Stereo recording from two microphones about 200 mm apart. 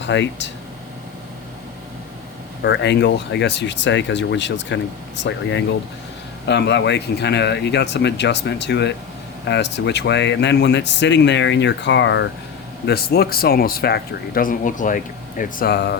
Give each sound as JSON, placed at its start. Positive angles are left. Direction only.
{"t": 0.0, "sound": "speech", "side_deg": 65}
{"t": 2.6, "sound": "speech", "side_deg": 60}
{"t": 12.8, "sound": "speech", "side_deg": 55}